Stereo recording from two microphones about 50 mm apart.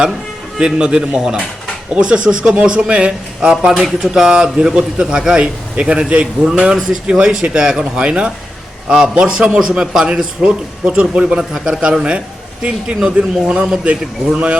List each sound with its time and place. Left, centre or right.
0.6 s a man's voice: centre
13.4 s a man's voice: centre